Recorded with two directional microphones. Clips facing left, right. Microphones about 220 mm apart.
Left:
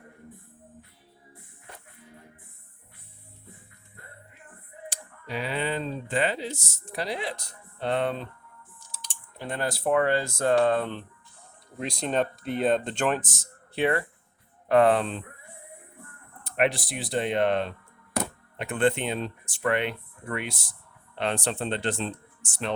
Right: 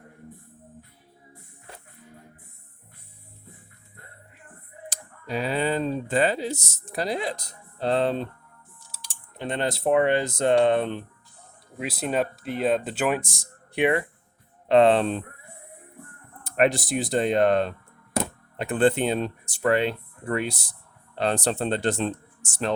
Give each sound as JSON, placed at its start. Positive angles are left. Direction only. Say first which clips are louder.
{"t": 4.9, "sound": "speech", "louder": "right 4 dB", "side_deg": -40}
{"t": 9.4, "sound": "speech", "louder": "right 3 dB", "side_deg": -20}
{"t": 11.8, "sound": "speech", "louder": "right 1 dB", "side_deg": -5}
{"t": 16.4, "sound": "speech", "louder": "right 4 dB", "side_deg": -45}